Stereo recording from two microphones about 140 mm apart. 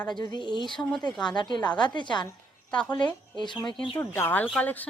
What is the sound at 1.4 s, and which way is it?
Speech, 30° left (ahead or behind).